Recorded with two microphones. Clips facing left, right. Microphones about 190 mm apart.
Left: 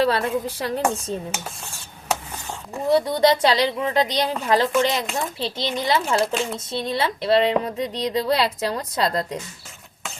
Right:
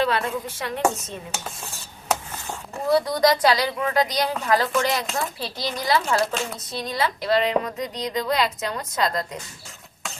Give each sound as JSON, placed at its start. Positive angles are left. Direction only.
{"t": 0.0, "sound": "speech", "side_deg": 35}
{"t": 2.9, "sound": "a woman's voice", "side_deg": 25}